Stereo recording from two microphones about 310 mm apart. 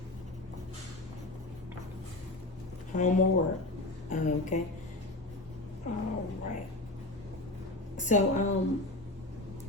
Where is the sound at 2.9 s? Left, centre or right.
Left.